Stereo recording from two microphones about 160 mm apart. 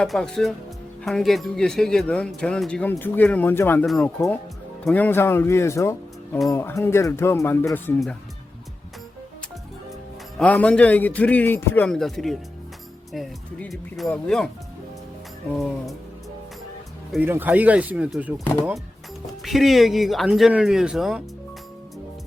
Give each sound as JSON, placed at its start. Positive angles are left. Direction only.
{"t": 0.0, "sound": "speech", "side_deg": 5}
{"t": 3.8, "sound": "speech", "side_deg": 5}
{"t": 10.3, "sound": "speech", "side_deg": 10}
{"t": 15.5, "sound": "speech", "side_deg": 0}
{"t": 17.2, "sound": "speech", "side_deg": -10}